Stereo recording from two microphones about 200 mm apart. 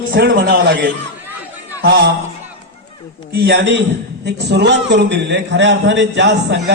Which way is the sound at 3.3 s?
55° right (ahead or behind).